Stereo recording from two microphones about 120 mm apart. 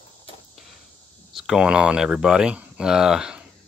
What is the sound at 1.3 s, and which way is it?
Speech, 5° right (ahead or behind).